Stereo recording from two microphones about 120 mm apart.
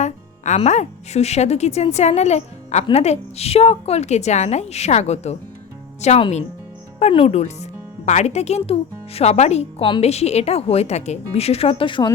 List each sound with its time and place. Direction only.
0.0 s speech: 75° left (ahead or behind); by 12.1 s 45° left (ahead or behind)